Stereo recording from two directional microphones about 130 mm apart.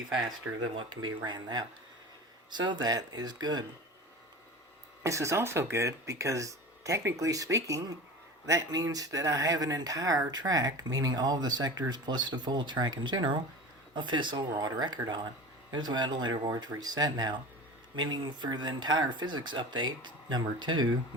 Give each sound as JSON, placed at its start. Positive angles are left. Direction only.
{"t": 0.8, "sound": "speech", "side_deg": -35}
{"t": 5.0, "sound": "speech", "side_deg": -20}